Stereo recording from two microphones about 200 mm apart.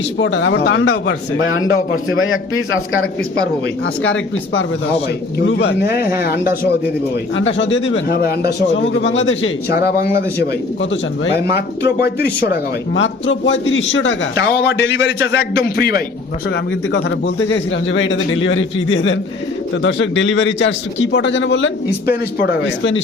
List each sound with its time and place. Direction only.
0.2 s speech: 60° left (ahead or behind); by 2.8 s 90° left
4.0 s speech: 75° left (ahead or behind)
5.5 s speech: 60° left (ahead or behind)
7.3 s speech: 70° left (ahead or behind)
8.2 s speech: 55° left (ahead or behind); by 9.5 s 70° left (ahead or behind)
9.7 s speech: 50° left (ahead or behind)
11.3 s speech: 55° left (ahead or behind)
16.9 s speech: 65° left (ahead or behind)